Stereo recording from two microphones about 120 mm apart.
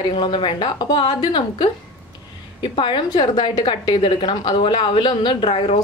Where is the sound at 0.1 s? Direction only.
45° left (ahead or behind).